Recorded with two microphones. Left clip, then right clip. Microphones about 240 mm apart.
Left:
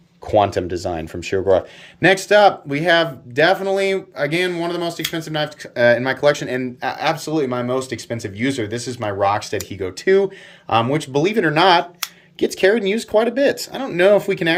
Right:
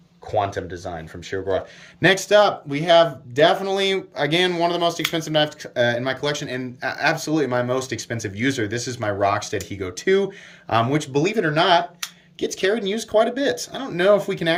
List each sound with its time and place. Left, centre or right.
0.3 s speech: left
2.0 s speech: centre